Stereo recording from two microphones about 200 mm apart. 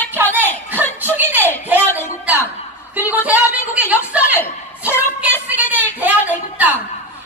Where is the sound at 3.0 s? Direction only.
10° right (ahead or behind).